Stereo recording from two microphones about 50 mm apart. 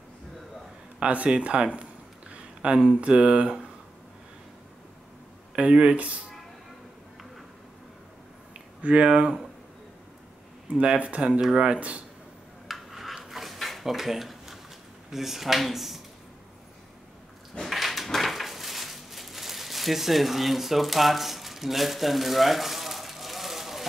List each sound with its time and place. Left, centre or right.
0.9 s speech: right
2.3 s a sound: centre
3.0 s speech: right
5.6 s speech: right
8.8 s speech: right
11.0 s speech: right
12.6 s dishes: centre
15.0 s speech: centre
17.6 s a sound: centre